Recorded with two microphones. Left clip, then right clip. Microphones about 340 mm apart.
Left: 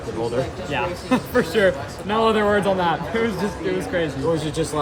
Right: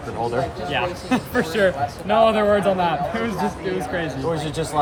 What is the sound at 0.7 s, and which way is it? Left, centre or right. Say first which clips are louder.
A man's voice: left 1 dB; centre.